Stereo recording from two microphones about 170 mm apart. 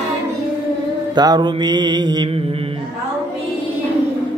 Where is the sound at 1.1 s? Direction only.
25° right (ahead or behind).